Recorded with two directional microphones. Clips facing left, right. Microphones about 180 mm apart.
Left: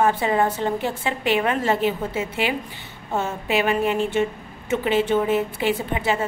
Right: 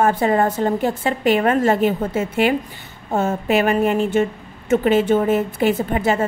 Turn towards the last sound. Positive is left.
turn(degrees=-45)  # may be behind; listen again after turning